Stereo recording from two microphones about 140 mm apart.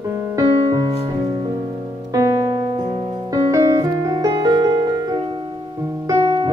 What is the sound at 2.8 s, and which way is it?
Music, 30° right (ahead or behind).